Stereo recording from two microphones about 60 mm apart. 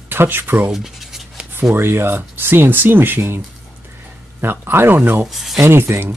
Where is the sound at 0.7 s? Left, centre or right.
Centre.